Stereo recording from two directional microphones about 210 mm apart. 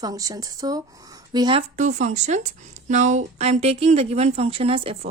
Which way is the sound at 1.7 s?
35° right (ahead or behind).